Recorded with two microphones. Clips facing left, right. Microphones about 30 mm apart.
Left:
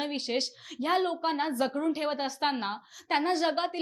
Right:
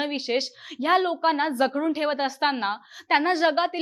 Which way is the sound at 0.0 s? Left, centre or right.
Centre.